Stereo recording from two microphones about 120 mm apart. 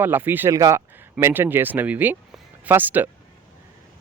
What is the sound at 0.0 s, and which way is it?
Speech, 15° right (ahead or behind).